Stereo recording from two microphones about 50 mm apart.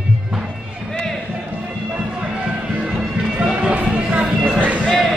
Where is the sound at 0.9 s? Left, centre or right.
Centre.